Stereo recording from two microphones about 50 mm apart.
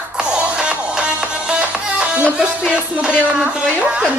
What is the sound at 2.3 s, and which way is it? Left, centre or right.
Music, centre.